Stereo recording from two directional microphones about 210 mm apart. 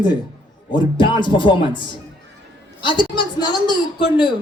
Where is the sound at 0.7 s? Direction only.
20° left (ahead or behind).